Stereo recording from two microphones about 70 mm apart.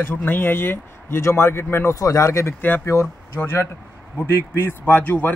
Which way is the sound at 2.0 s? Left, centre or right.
Left.